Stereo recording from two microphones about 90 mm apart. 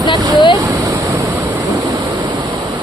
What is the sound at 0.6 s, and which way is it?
Speech, 40° right (ahead or behind).